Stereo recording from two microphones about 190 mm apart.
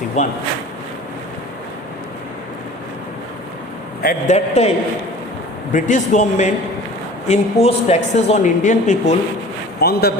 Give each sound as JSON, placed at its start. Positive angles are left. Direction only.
{"t": 0.2, "sound": "a woman's voice", "side_deg": 40}
{"t": 4.0, "sound": "a man's voice", "side_deg": 50}
{"t": 4.4, "sound": "a woman's voice", "side_deg": 35}
{"t": 5.7, "sound": "a woman's voice", "side_deg": 40}
{"t": 9.8, "sound": "a man's voice", "side_deg": 55}